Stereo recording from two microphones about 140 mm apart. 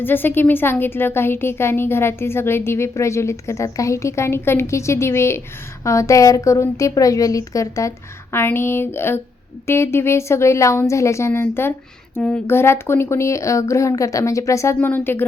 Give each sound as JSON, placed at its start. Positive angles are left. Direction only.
{"t": 0.0, "sound": "a woman's voice", "side_deg": 15}